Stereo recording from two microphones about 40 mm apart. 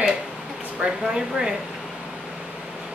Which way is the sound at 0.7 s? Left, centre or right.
Centre.